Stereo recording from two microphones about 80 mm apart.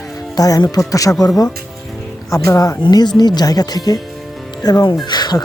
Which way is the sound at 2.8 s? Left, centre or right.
Left.